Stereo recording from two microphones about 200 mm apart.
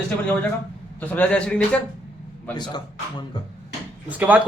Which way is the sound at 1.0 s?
5° left (ahead or behind).